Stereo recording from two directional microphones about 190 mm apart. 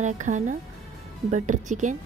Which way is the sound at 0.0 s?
40° right (ahead or behind).